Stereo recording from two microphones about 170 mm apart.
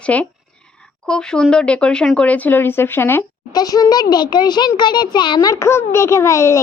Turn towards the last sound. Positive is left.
turn(degrees=15)  # may be behind; listen again after turning